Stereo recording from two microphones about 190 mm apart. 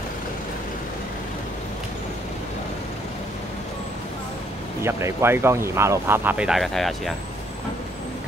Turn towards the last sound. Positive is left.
turn(degrees=0)  # may be behind; listen again after turning